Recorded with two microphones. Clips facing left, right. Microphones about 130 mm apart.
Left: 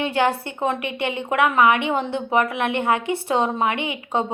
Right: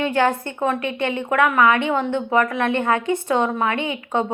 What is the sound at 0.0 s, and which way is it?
A woman's voice, 15° left (ahead or behind).